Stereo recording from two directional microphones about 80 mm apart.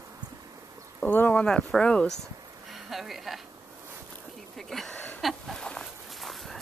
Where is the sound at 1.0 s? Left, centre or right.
Left.